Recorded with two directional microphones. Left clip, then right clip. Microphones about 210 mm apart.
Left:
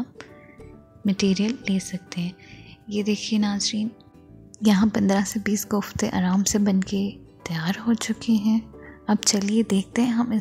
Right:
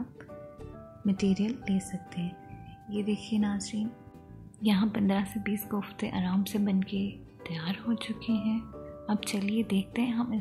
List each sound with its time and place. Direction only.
1.0 s a woman's voice: 30° left (ahead or behind)
3.3 s a woman's voice: 35° left (ahead or behind)